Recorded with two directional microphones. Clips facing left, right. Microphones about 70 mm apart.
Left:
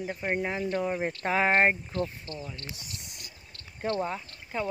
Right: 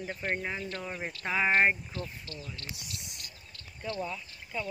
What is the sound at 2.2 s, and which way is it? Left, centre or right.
Speech, left.